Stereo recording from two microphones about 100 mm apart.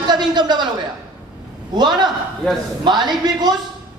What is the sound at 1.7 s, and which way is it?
A woman's voice, 45° right (ahead or behind).